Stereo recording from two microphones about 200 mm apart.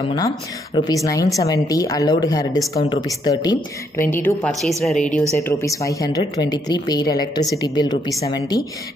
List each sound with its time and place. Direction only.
0.7 s speech: 20° left (ahead or behind)
5.4 s a woman's voice: 15° left (ahead or behind)